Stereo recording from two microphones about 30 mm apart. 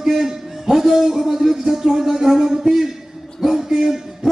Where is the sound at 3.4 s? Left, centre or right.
Centre.